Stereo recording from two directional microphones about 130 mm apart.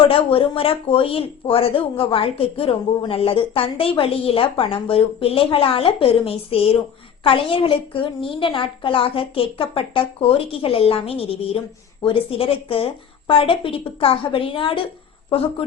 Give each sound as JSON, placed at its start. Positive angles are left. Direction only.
{"t": 0.0, "sound": "speech", "side_deg": 45}